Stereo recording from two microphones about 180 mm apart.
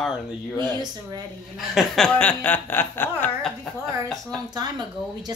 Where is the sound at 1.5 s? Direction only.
Centre (ahead or behind).